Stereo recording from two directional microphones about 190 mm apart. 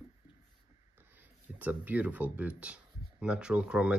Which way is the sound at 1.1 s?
10° right (ahead or behind).